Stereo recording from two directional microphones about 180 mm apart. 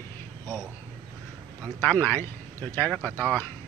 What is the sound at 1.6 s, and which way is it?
Speech, 10° left (ahead or behind).